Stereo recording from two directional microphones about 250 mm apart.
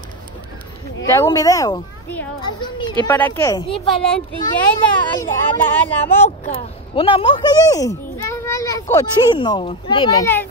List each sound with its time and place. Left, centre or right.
1.0 s speech: centre
3.7 s speech: centre
4.7 s speech: centre
6.2 s speech: left; by 10.5 s centre